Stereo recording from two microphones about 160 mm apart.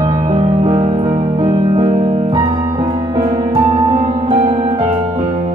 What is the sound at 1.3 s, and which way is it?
Music, 30° right (ahead or behind).